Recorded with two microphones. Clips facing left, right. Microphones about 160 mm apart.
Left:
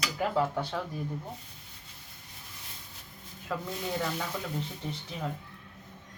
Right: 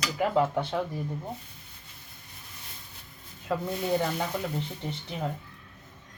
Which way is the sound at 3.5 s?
30° right (ahead or behind).